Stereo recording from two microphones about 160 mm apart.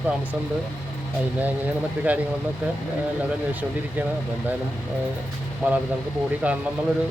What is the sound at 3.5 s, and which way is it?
Speech, 10° right (ahead or behind).